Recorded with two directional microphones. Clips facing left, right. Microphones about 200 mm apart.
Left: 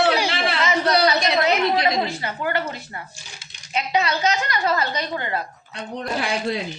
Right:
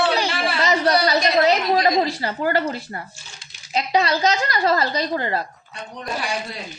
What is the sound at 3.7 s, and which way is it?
A woman's voice, 35° right (ahead or behind).